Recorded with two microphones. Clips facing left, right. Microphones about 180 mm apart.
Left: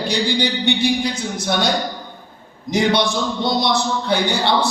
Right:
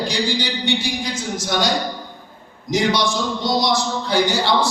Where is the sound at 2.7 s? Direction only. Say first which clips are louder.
Left 2 dB; 60° left (ahead or behind).